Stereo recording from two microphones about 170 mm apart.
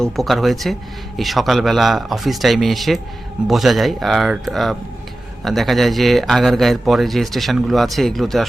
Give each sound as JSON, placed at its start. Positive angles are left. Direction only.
{"t": 0.0, "sound": "a man's voice", "side_deg": 0}